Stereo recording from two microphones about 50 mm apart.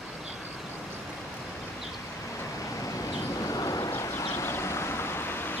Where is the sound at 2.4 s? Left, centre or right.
Left.